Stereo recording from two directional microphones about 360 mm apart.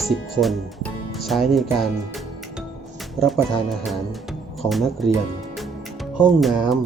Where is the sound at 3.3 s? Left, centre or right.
Centre.